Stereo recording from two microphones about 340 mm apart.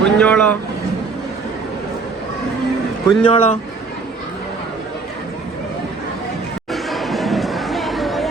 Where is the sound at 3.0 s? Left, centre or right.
Centre.